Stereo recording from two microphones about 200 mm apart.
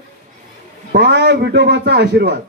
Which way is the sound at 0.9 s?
60° right (ahead or behind).